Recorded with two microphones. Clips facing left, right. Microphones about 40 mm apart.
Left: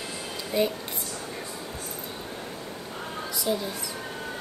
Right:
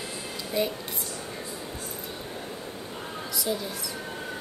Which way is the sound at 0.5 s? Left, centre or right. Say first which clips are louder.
Left 3 dB; centre.